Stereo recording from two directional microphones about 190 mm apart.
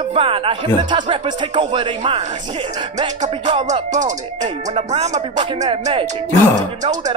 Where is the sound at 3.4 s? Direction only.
35° right (ahead or behind).